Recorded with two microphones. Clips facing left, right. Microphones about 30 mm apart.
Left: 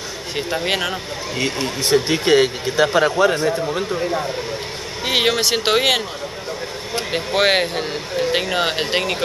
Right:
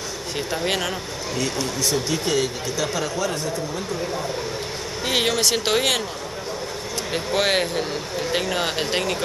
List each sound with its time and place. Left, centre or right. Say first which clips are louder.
0.5 s speech: left 3 dB; centre
1.3 s speech: left 3 dB; left
5.0 s speech: left 3 dB; left
7.1 s speech: left 4 dB; left